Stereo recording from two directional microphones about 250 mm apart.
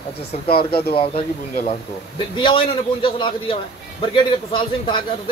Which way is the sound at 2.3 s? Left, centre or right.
Centre.